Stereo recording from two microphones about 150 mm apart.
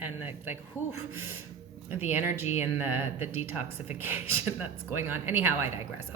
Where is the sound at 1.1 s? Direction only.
15° right (ahead or behind).